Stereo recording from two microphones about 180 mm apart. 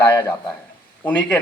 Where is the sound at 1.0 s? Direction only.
10° left (ahead or behind).